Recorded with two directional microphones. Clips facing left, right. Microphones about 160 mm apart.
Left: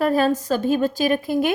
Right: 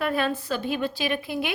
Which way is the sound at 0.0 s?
40° left (ahead or behind).